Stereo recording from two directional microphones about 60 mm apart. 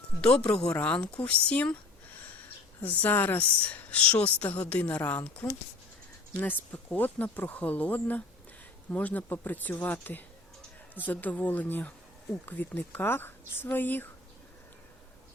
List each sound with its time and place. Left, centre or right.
0.2 s a woman's voice: centre
2.8 s a woman's voice: left